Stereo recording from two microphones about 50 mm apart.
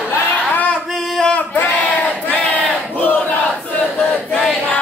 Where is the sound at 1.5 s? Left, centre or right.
Left.